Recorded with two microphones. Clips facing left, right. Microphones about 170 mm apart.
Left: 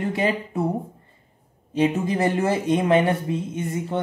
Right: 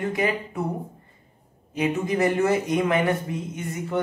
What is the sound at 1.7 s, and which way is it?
A woman's voice, 30° left (ahead or behind).